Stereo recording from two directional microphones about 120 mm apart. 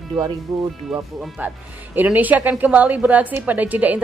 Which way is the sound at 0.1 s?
40° right (ahead or behind).